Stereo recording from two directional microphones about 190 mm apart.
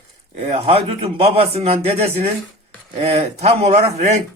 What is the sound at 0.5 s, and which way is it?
Speech, 30° right (ahead or behind).